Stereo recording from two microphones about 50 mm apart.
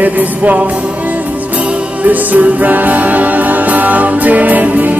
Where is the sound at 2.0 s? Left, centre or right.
Right.